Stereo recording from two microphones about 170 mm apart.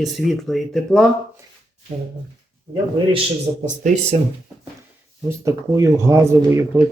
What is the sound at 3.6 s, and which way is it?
Speech, 45° right (ahead or behind).